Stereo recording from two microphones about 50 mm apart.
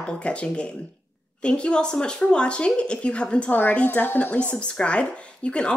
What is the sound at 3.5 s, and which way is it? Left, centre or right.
A woman's voice, left.